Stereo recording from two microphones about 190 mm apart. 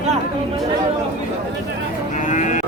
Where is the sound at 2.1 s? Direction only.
40° left (ahead or behind).